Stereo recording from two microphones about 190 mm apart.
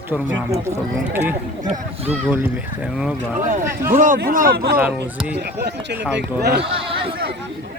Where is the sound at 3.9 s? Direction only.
45° right (ahead or behind).